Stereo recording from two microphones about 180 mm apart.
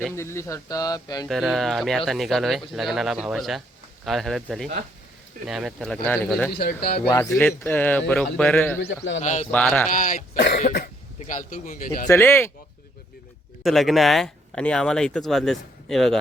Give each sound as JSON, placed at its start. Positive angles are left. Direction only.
{"t": 0.2, "sound": "speech", "side_deg": 15}
{"t": 1.3, "sound": "speech", "side_deg": 0}
{"t": 6.5, "sound": "speech", "side_deg": 60}
{"t": 7.1, "sound": "a man's voice", "side_deg": 15}
{"t": 9.2, "sound": "speech", "side_deg": 40}
{"t": 9.5, "sound": "a man's voice", "side_deg": 10}
{"t": 9.9, "sound": "cough", "side_deg": 50}
{"t": 10.3, "sound": "cough", "side_deg": 75}
{"t": 10.6, "sound": "cough", "side_deg": 50}
{"t": 11.2, "sound": "a man's voice", "side_deg": 45}
{"t": 12.0, "sound": "a man's voice", "side_deg": 15}
{"t": 13.6, "sound": "speech", "side_deg": 0}